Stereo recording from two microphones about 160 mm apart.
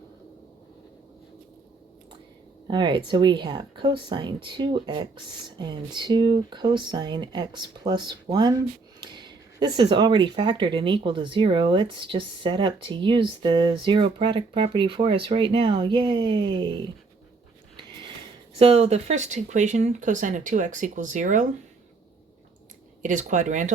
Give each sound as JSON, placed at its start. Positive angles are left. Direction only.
{"t": 2.6, "sound": "speech", "side_deg": -30}
{"t": 17.7, "sound": "a sound", "side_deg": -30}
{"t": 18.6, "sound": "speech", "side_deg": -40}
{"t": 23.0, "sound": "speech", "side_deg": -50}